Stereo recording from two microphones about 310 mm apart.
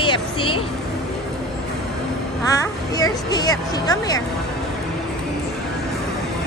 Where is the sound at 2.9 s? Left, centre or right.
Centre.